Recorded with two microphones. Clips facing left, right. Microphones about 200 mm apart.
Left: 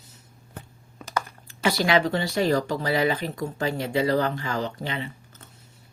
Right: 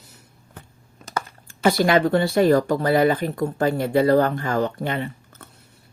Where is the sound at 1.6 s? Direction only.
50° right (ahead or behind).